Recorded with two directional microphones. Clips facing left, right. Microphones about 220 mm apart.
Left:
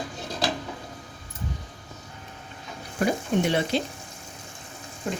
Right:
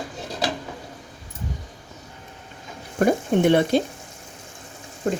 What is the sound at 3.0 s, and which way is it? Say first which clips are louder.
Speech: right 5 dB; 55° right (ahead or behind).